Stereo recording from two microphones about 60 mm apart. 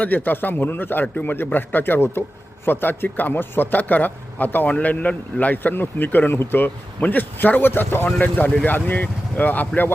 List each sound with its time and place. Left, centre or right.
0.0 s a man's voice: left